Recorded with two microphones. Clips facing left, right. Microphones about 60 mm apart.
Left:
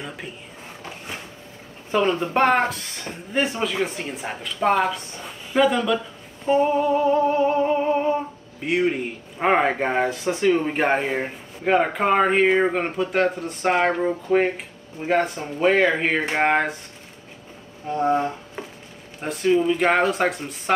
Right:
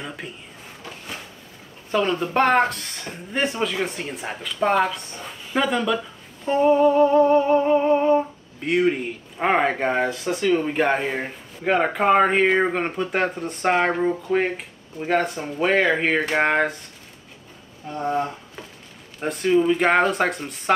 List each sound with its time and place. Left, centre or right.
0.2 s speech: centre
1.9 s speech: centre
2.3 s humming: centre
10.0 s speech: left
10.7 s speech: left
11.0 s speech: centre
11.6 s humming: centre
13.1 s speech: centre
13.8 s humming: centre
15.0 s speech: centre
15.3 s humming: centre
18.0 s speech: left
19.2 s humming: centre